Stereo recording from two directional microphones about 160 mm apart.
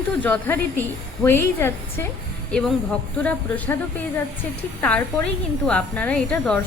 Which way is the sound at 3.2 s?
10° left (ahead or behind).